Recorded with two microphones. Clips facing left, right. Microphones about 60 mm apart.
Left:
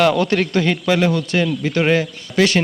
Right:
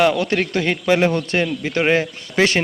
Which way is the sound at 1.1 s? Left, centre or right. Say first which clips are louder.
Left 1 dB; right.